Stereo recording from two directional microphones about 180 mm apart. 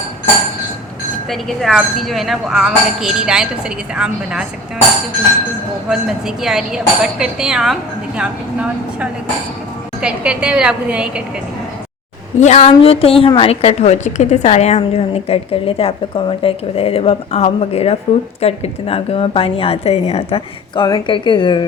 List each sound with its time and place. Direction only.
1.3 s speech: centre (ahead or behind)
5.9 s speech: centre (ahead or behind)
10.0 s a woman's voice: 5° right (ahead or behind)
12.4 s a woman's voice: 40° left (ahead or behind)